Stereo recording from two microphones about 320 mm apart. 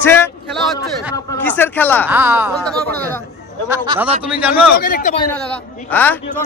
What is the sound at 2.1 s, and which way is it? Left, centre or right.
Speech, centre.